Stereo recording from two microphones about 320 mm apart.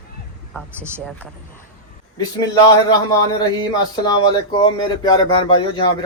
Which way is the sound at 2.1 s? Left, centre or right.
Centre.